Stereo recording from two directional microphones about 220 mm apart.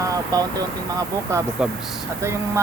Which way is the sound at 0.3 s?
15° right (ahead or behind).